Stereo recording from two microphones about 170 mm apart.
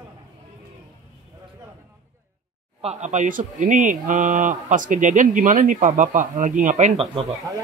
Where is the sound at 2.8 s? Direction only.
40° right (ahead or behind).